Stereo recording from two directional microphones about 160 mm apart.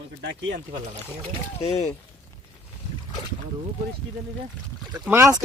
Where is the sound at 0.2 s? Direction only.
90° right.